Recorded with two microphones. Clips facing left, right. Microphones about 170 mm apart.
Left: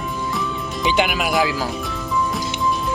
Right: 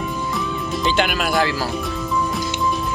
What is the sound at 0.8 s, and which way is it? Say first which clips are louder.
Speech: left 1 dB; 15° left (ahead or behind).